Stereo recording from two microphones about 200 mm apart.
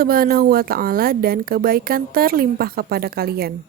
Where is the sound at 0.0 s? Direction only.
45° right (ahead or behind).